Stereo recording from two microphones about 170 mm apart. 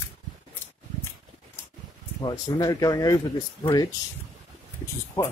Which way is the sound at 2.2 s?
20° left (ahead or behind).